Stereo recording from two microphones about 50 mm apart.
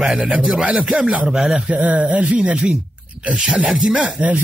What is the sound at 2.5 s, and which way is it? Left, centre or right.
Speech, centre.